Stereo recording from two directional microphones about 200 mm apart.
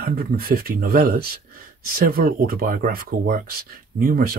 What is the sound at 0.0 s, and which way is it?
Speech, 45° right (ahead or behind).